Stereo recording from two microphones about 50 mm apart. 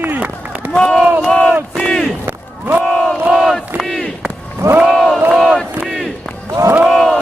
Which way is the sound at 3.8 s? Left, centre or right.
Centre.